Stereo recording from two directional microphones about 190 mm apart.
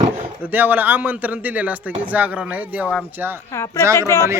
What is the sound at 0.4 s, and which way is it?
A man's voice, 10° right (ahead or behind).